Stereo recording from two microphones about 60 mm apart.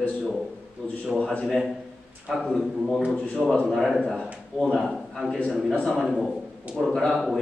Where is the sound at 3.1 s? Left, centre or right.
Left.